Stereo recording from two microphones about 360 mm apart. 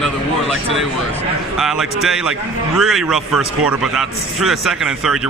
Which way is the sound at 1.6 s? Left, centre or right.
Centre.